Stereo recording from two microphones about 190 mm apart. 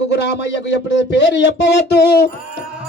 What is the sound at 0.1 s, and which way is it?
Music, 65° left (ahead or behind).